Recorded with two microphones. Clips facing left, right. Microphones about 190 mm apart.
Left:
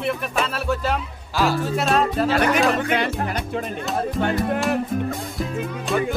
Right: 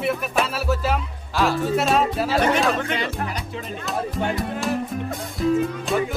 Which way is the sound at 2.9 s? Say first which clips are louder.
Left 4 dB; 60° left (ahead or behind).